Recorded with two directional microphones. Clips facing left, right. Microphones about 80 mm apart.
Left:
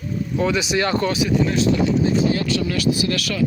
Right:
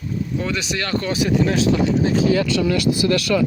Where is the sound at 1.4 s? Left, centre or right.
Right.